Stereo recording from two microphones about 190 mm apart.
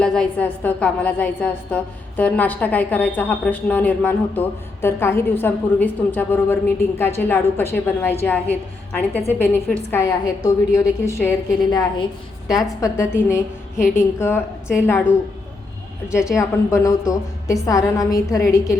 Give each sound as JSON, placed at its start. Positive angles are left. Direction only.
{"t": 0.0, "sound": "speech", "side_deg": 5}
{"t": 16.4, "sound": "speech", "side_deg": 15}